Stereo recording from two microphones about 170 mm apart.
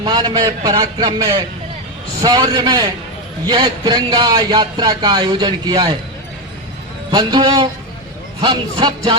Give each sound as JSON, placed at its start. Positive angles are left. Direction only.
{"t": 0.0, "sound": "speech", "side_deg": -25}
{"t": 7.1, "sound": "speech", "side_deg": -25}